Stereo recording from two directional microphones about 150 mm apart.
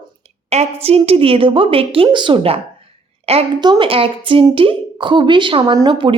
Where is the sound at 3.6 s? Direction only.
30° right (ahead or behind).